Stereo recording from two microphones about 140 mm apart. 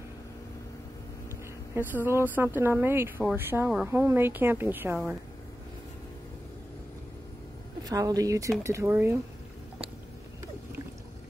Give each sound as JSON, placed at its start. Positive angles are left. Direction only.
{"t": 1.8, "sound": "speech", "side_deg": -15}
{"t": 7.8, "sound": "speech", "side_deg": -25}